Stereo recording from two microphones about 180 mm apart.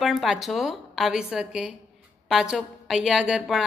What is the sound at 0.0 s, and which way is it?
A woman's voice, centre (ahead or behind).